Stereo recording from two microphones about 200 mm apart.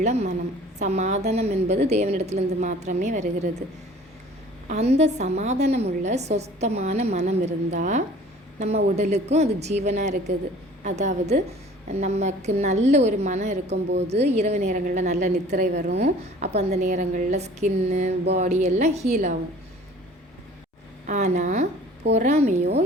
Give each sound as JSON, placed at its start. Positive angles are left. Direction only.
{"t": 0.0, "sound": "a woman's voice", "side_deg": -35}
{"t": 4.7, "sound": "a woman's voice", "side_deg": -35}
{"t": 15.4, "sound": "a woman's voice", "side_deg": -55}
{"t": 15.9, "sound": "a woman's voice", "side_deg": -35}
{"t": 21.1, "sound": "a woman's voice", "side_deg": -35}